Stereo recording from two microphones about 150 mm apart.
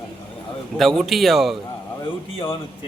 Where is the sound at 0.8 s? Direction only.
Centre (ahead or behind).